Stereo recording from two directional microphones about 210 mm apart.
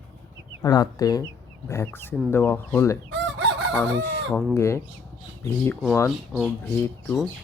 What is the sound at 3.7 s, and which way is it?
Chicken, 5° left (ahead or behind).